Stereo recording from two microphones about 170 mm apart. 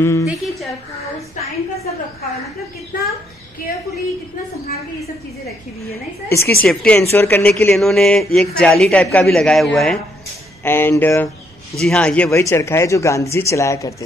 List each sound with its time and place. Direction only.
0.0 s speech: 15° left (ahead or behind)
2.9 s a child's voice: 50° left (ahead or behind)
6.2 s speech: 15° left (ahead or behind)
10.6 s speech: 15° left (ahead or behind)